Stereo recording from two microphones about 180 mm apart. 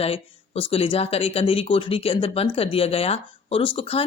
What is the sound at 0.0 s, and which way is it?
Speech, 35° left (ahead or behind).